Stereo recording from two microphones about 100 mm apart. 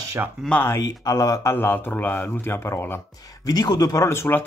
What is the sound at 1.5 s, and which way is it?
Speech, 20° left (ahead or behind).